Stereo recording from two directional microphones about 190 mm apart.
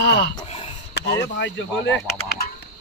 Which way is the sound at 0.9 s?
65° left (ahead or behind).